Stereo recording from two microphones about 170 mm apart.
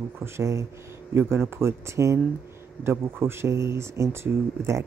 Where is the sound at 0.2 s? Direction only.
15° right (ahead or behind).